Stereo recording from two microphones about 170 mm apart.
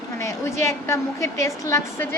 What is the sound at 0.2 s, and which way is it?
A woman's voice, 15° left (ahead or behind).